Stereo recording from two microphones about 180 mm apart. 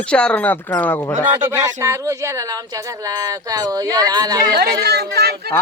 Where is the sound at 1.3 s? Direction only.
20° right (ahead or behind).